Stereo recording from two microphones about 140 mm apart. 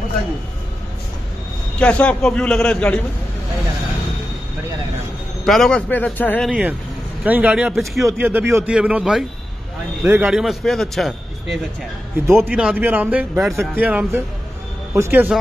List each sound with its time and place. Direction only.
1.8 s a man's voice: 10° left (ahead or behind)
5.4 s a man's voice: centre (ahead or behind)
6.4 s a man's voice: 5° right (ahead or behind)
8.0 s a man's voice: 15° right (ahead or behind)
10.3 s a man's voice: centre (ahead or behind)
12.3 s a man's voice: 15° right (ahead or behind)